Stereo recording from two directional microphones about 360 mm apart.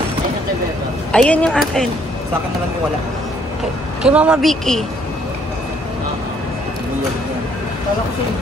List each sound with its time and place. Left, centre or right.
1.1 s a woman's voice: centre
4.0 s a woman's voice: centre